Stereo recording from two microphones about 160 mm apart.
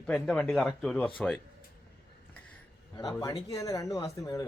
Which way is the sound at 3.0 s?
25° left (ahead or behind).